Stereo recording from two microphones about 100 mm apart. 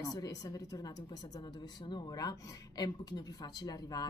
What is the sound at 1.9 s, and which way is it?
A woman's voice, 45° left (ahead or behind).